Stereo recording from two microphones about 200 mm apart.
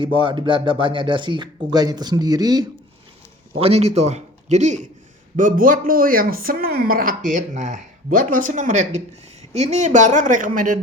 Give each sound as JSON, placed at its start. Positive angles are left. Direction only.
{"t": 0.0, "sound": "speech", "side_deg": -25}
{"t": 3.6, "sound": "a man's voice", "side_deg": -30}